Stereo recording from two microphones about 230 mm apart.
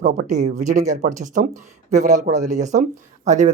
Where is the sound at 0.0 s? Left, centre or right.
Right.